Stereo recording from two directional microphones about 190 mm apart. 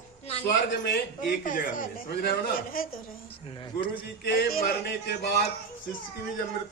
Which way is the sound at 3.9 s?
55° left (ahead or behind).